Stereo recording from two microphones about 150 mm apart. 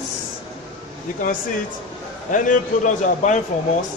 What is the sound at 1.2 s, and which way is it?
A man's voice, 65° left (ahead or behind).